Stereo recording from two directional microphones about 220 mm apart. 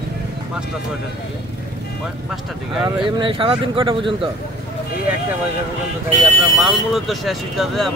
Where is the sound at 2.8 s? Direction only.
20° right (ahead or behind).